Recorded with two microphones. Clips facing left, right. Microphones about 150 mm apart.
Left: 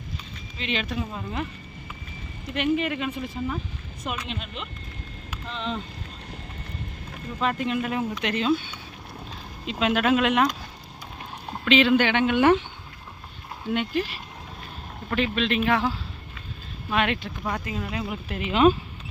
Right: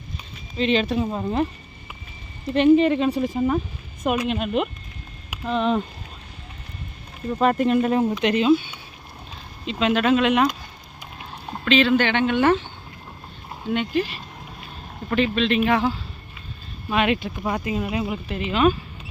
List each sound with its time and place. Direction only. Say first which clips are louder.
0.5 s a woman's voice: right 9 dB; 35° right (ahead or behind)
2.5 s a woman's voice: right 9 dB; 30° right (ahead or behind); by 5.8 s 55° right (ahead or behind)
7.3 s speech: right 7 dB; 45° right (ahead or behind)
8.2 s speech: right 5 dB; 15° right (ahead or behind)
9.6 s speech: right 3 dB; 5° left (ahead or behind)
11.6 s speech: right 1 dB; 15° left (ahead or behind)
13.7 s speech: right 3 dB; centre (ahead or behind); by 18.1 s 15° right (ahead or behind)
18.1 s speech: right 3 dB; 5° left (ahead or behind)
18.5 s speech: left 1 dB; 25° left (ahead or behind)